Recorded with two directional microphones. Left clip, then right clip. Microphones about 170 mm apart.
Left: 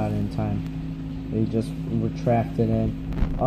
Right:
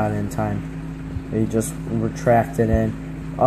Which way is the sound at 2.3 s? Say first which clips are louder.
Right 6 dB; 45° right (ahead or behind).